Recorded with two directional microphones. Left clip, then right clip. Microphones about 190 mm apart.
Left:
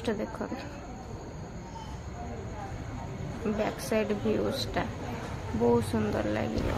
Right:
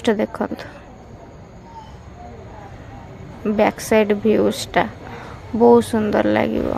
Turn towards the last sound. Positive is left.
turn(degrees=-45)  # may be behind; listen again after turning